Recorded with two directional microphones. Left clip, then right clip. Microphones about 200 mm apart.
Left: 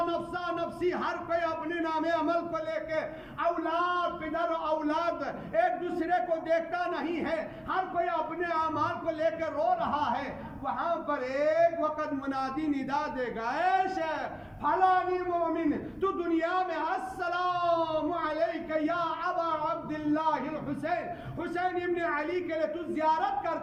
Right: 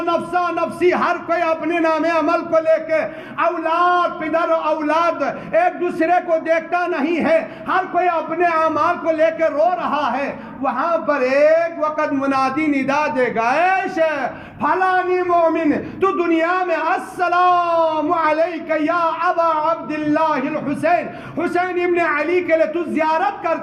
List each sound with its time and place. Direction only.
0.3 s a man's voice: 20° left (ahead or behind)